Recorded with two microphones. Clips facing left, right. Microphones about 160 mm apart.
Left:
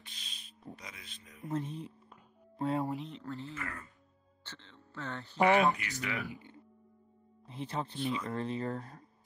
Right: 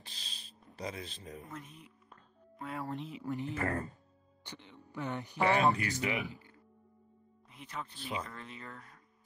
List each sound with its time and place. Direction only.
0.0 s a sound: 35° right (ahead or behind)
0.7 s speech: 35° right (ahead or behind)
1.5 s speech: 30° left (ahead or behind)
2.9 s speech: centre (ahead or behind)
3.2 s speech: 15° right (ahead or behind)
3.5 s speech: 35° right (ahead or behind)
4.5 s speech: 15° right (ahead or behind)
5.6 s speech: 35° right (ahead or behind)
6.3 s music: 25° left (ahead or behind)
7.4 s speech: 30° left (ahead or behind)